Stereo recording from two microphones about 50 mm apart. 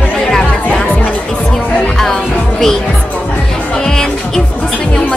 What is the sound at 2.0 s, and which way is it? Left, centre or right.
Music, centre.